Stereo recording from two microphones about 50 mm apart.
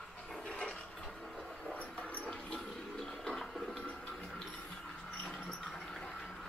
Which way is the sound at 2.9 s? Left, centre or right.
Centre.